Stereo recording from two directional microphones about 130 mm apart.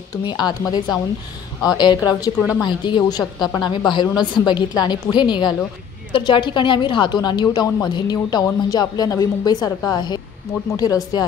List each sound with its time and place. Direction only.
0.2 s a woman's voice: 35° left (ahead or behind)